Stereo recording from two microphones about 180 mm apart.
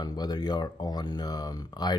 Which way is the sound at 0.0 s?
20° left (ahead or behind).